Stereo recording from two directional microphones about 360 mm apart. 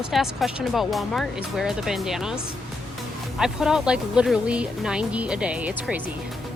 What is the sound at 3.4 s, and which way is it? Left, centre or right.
Speech, centre.